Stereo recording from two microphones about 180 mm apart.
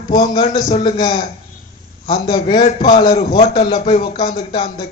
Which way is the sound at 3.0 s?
25° left (ahead or behind).